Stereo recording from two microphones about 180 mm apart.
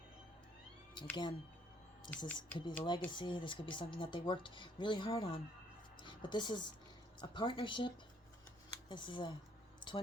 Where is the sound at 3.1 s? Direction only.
25° left (ahead or behind).